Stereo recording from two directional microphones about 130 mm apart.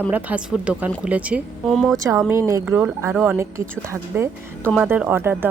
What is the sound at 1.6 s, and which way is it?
Speech, centre (ahead or behind).